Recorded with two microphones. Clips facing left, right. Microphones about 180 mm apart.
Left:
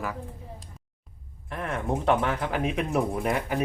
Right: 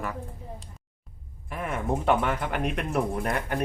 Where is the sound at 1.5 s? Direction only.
5° right (ahead or behind).